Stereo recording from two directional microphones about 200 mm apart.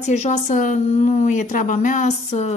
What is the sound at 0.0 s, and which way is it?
Speech, 35° left (ahead or behind).